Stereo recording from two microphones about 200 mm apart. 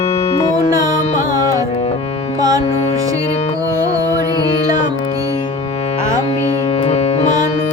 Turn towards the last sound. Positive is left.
turn(degrees=35)  # may be behind; listen again after turning